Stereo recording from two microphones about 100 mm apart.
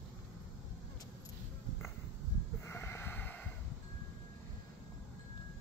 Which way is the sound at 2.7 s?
25° left (ahead or behind).